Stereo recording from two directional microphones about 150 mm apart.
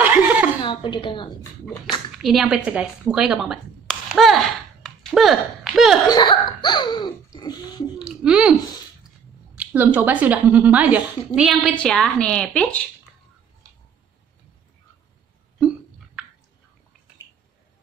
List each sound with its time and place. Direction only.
0.0 s chuckle: 10° right (ahead or behind)
0.6 s speech: 35° left (ahead or behind)
2.1 s speech: 5° right (ahead or behind)
4.8 s a sound: centre (ahead or behind)
6.0 s cough: 30° left (ahead or behind)
8.0 s speech: 5° right (ahead or behind)
9.6 s a sound: 10° right (ahead or behind)
9.9 s a woman's voice: 10° right (ahead or behind); by 12.8 s 5° left (ahead or behind)